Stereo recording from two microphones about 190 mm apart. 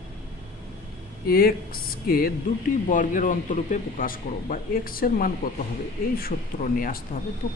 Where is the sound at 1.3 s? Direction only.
50° left (ahead or behind).